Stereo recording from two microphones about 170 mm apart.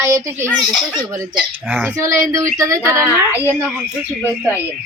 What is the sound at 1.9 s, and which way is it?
Speech, 15° right (ahead or behind).